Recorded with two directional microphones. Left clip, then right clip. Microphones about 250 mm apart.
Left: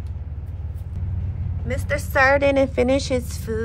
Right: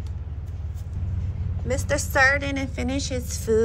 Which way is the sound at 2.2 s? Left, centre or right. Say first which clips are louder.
Left 7 dB; centre.